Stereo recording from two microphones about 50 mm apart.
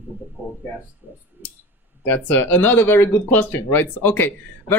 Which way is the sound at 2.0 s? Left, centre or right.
Left.